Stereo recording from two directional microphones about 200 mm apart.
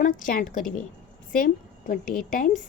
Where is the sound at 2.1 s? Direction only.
Centre (ahead or behind).